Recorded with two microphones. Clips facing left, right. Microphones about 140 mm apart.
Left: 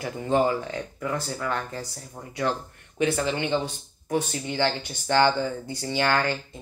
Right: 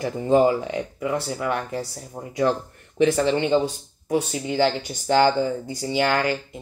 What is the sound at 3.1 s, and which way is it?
Speech, 40° right (ahead or behind).